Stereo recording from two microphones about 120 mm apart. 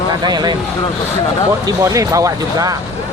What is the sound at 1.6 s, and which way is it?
Speech, 30° right (ahead or behind).